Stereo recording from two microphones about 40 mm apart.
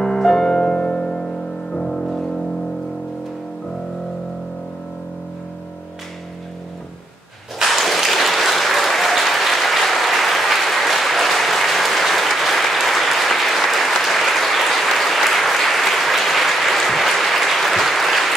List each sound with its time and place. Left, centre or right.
0.0 s music: centre
7.6 s applause: centre